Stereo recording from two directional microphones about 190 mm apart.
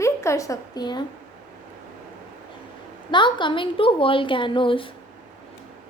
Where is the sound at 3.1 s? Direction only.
25° left (ahead or behind).